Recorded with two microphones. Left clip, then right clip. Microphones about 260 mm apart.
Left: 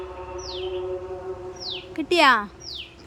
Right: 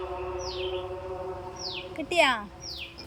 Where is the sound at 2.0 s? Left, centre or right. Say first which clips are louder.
Left 6 dB; centre.